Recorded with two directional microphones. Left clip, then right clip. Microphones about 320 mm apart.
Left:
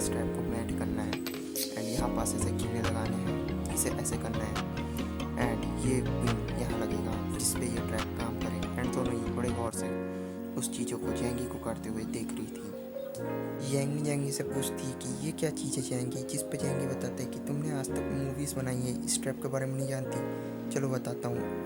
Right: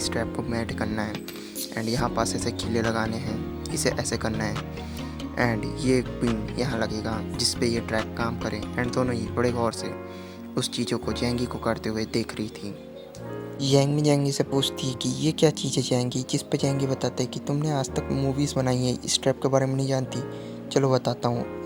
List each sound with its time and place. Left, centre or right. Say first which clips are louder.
0.1 s speech: right 5 dB; left
3.8 s speech: right 12 dB; left
9.0 s speech: right 9 dB; left
13.6 s speech: right 16 dB; left